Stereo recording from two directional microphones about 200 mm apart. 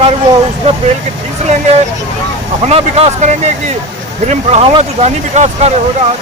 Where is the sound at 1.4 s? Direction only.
35° right (ahead or behind).